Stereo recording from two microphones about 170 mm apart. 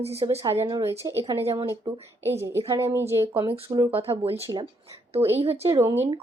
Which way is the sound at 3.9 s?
35° right (ahead or behind).